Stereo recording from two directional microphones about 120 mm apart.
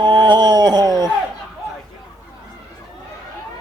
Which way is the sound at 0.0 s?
40° right (ahead or behind).